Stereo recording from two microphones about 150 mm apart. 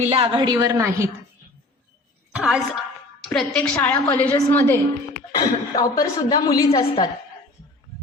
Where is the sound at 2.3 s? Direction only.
5° right (ahead or behind); by 6.8 s 25° left (ahead or behind).